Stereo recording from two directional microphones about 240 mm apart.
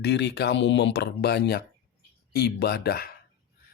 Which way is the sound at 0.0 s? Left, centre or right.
Left.